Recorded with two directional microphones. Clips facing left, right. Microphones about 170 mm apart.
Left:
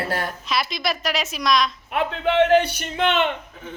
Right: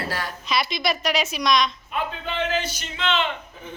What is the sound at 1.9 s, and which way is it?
A man's voice, 70° left (ahead or behind).